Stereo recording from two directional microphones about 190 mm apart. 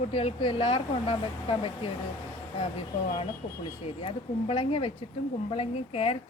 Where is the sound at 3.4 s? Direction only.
35° left (ahead or behind).